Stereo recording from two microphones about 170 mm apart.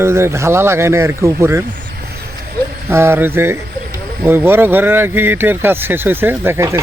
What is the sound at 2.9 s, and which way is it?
Speech, 15° right (ahead or behind).